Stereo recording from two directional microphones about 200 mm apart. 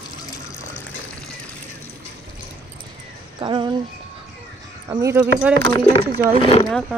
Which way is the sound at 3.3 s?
25° right (ahead or behind).